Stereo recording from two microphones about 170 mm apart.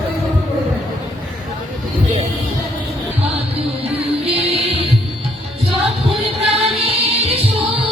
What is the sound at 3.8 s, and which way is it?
Music, 35° right (ahead or behind).